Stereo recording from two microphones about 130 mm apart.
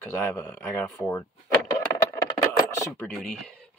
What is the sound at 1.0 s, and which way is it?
Speech, 20° left (ahead or behind).